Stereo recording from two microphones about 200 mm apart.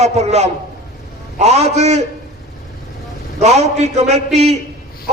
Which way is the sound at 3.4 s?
35° right (ahead or behind).